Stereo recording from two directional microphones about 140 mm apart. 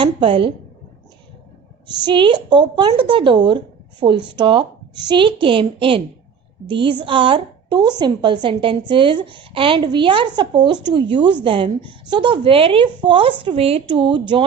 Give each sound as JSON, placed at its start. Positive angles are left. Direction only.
{"t": 0.0, "sound": "a woman's voice", "side_deg": -35}
{"t": 2.0, "sound": "a woman's voice", "side_deg": -35}